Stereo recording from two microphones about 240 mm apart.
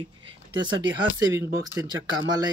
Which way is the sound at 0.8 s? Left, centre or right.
Centre.